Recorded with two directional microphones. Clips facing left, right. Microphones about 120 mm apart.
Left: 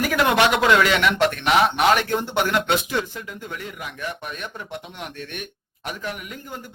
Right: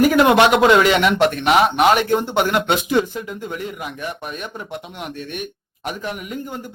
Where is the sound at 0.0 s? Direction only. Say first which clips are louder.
Right 6 dB; 25° right (ahead or behind).